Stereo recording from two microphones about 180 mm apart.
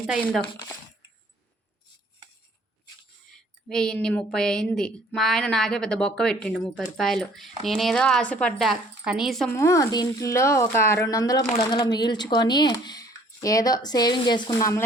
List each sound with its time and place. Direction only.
3.7 s speech: 5° left (ahead or behind)
9.6 s speech: 15° left (ahead or behind)